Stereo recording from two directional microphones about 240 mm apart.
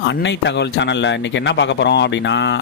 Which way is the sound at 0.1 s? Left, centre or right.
Left.